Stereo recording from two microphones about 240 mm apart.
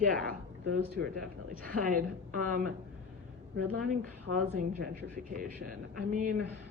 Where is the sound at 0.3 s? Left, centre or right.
Right.